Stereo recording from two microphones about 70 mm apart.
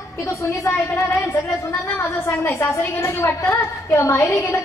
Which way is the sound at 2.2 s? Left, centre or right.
Left.